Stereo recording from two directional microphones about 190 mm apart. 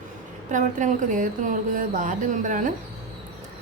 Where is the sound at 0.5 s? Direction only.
40° right (ahead or behind).